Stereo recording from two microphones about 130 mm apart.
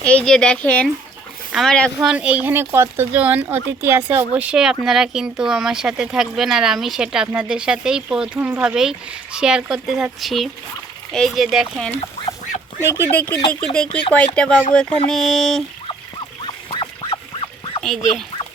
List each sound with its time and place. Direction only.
0.0 s speech: 10° left (ahead or behind)
2.0 s speech: 5° right (ahead or behind)
13.1 s speech: 15° left (ahead or behind)
16.6 s duck: 40° left (ahead or behind)